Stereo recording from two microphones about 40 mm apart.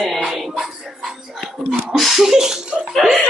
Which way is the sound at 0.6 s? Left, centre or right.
Centre.